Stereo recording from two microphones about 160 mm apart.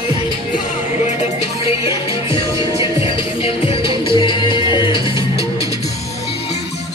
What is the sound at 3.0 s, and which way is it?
Music, 35° left (ahead or behind).